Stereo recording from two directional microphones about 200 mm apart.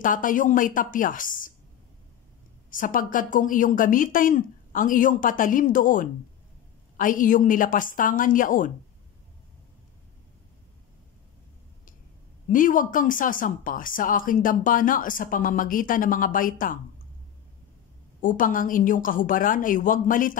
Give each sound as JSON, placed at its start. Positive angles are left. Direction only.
{"t": 0.0, "sound": "a woman's voice", "side_deg": 40}
{"t": 2.7, "sound": "a woman's voice", "side_deg": 40}
{"t": 12.4, "sound": "speech", "side_deg": 40}
{"t": 18.2, "sound": "speech", "side_deg": 40}